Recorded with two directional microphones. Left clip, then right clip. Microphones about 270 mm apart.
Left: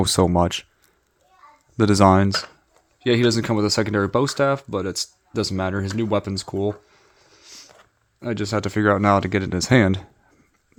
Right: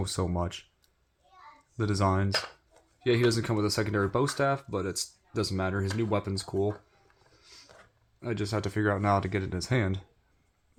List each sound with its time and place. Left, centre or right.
0.0 s speech: left
1.7 s speech: left